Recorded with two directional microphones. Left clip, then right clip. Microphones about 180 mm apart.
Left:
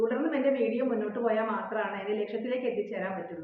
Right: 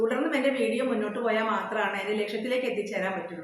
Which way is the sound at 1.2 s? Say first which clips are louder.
Right 2 dB; centre (ahead or behind).